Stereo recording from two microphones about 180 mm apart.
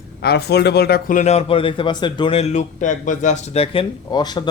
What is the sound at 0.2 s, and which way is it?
A man's voice, 65° left (ahead or behind).